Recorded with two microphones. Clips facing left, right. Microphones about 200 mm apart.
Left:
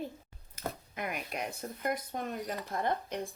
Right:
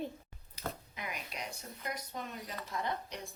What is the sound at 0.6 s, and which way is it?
Speech, 50° left (ahead or behind).